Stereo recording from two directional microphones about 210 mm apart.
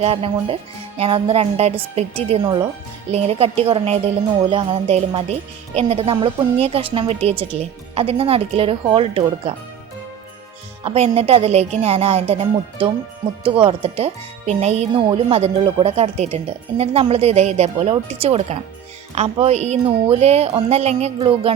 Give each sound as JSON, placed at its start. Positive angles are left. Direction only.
{"t": 0.0, "sound": "speech", "side_deg": -30}
{"t": 10.8, "sound": "speech", "side_deg": -30}